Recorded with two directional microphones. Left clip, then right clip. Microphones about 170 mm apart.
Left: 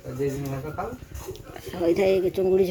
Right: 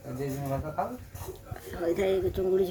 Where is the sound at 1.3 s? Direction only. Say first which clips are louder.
Left 5 dB; 20° left (ahead or behind).